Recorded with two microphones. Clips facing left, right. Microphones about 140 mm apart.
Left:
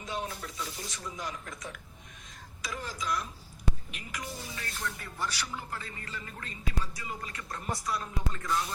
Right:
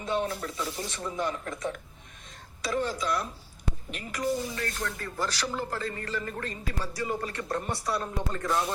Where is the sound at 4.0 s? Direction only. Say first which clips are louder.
Right 11 dB; 35° right (ahead or behind).